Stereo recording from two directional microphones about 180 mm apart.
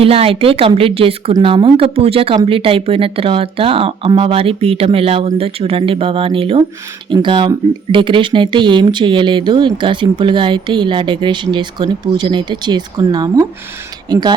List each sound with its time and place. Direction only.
0.0 s a woman's voice: 30° right (ahead or behind)